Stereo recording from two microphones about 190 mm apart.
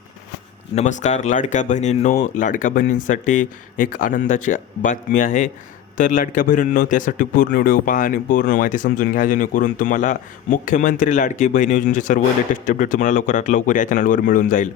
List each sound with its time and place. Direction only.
0.8 s a man's voice: 40° left (ahead or behind)